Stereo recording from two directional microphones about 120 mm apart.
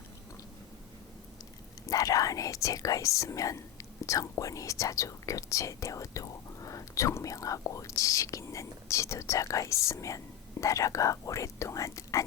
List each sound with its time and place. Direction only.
1.9 s speech: 30° left (ahead or behind)